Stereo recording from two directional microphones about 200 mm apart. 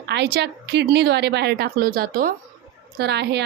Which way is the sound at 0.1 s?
55° right (ahead or behind).